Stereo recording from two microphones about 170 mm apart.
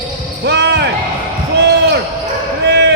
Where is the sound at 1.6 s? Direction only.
75° right (ahead or behind).